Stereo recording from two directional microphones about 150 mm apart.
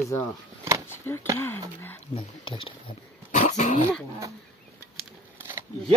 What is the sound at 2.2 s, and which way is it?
Speech, 35° left (ahead or behind).